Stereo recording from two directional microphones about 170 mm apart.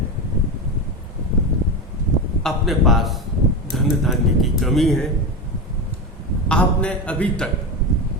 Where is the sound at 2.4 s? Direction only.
Centre (ahead or behind).